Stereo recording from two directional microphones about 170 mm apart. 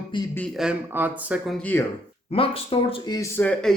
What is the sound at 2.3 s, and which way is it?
Speech, 35° left (ahead or behind).